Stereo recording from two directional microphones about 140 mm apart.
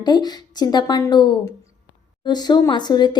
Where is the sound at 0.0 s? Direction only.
30° left (ahead or behind).